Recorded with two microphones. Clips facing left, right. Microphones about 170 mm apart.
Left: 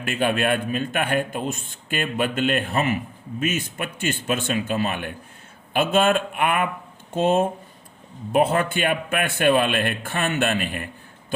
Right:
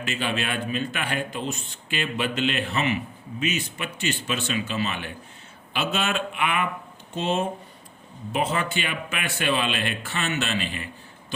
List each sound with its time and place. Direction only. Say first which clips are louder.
0.0 s a man's voice: left 6 dB; 55° left (ahead or behind)